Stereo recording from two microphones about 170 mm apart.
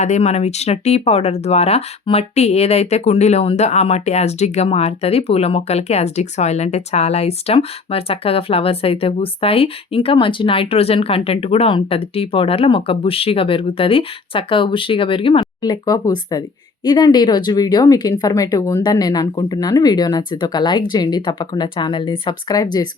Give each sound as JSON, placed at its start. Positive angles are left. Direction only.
{"t": 0.0, "sound": "speech", "side_deg": 40}